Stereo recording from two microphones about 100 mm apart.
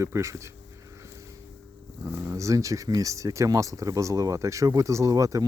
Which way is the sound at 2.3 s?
30° right (ahead or behind).